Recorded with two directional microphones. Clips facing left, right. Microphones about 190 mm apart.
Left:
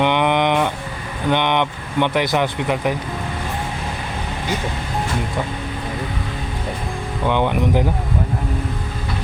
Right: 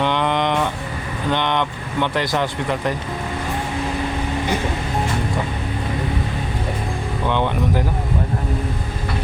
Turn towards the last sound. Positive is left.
turn(degrees=15)  # may be behind; listen again after turning